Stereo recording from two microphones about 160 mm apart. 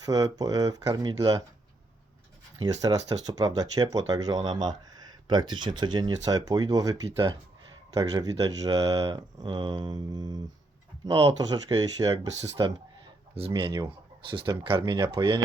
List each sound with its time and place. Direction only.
0.0 s speech: 25° right (ahead or behind)
2.6 s speech: 20° right (ahead or behind)